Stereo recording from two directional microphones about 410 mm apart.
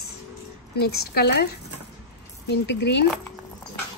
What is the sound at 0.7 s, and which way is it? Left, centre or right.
Speech, left.